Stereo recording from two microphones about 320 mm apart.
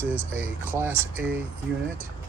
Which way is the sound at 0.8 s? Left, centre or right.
Centre.